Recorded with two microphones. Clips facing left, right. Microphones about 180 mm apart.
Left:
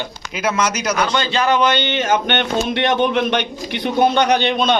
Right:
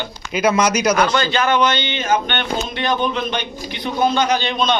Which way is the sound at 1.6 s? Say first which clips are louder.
Left 2 dB; 60° left (ahead or behind).